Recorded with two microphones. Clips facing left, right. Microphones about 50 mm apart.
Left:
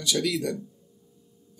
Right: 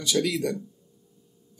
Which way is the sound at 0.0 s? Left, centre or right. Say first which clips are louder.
Right 1 dB; centre.